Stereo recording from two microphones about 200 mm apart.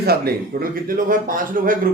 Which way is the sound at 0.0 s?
50° right (ahead or behind).